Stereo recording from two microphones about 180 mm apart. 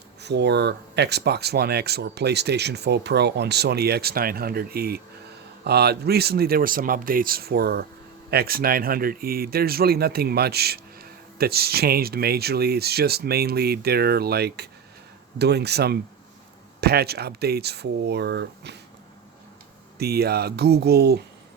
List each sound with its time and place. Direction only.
0.2 s speech: 70° right (ahead or behind)
20.0 s speech: 60° right (ahead or behind)